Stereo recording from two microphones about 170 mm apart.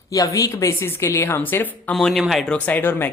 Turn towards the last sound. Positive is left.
turn(degrees=10)  # may be behind; listen again after turning